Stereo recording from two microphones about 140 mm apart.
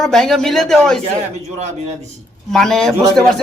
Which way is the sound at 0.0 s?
Centre (ahead or behind).